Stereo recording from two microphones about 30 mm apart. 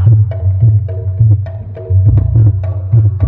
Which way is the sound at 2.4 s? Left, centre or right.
Left.